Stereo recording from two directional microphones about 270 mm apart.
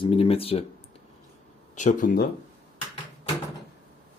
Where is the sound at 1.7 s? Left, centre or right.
Left.